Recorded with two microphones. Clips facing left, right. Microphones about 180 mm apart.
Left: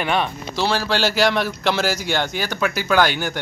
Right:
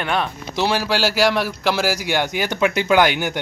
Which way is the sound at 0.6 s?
15° right (ahead or behind).